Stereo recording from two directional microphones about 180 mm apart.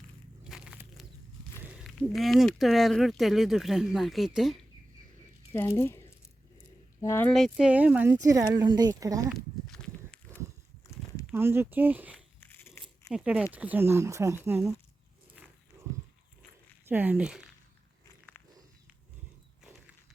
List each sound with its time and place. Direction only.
0.4 s a sound: 5° right (ahead or behind)
1.6 s walk: 5° right (ahead or behind)
2.0 s speech: centre (ahead or behind)
5.5 s speech: 15° left (ahead or behind)
7.3 s speech: centre (ahead or behind); by 9.3 s 20° right (ahead or behind)
9.3 s walk: 5° left (ahead or behind)
10.8 s a sound: 15° left (ahead or behind)
11.3 s speech: 15° right (ahead or behind)
12.1 s biting: 10° left (ahead or behind)
13.1 s speech: 5° right (ahead or behind)
15.4 s wild animals: 5° right (ahead or behind)
15.8 s livestock: 15° right (ahead or behind)
16.8 s speech: 10° right (ahead or behind)